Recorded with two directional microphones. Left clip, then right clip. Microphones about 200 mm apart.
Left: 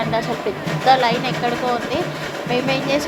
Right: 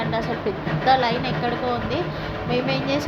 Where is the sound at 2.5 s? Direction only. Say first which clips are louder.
Left 4 dB; 15° left (ahead or behind).